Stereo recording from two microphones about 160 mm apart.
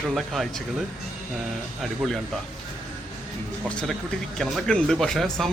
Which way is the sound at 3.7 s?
5° left (ahead or behind).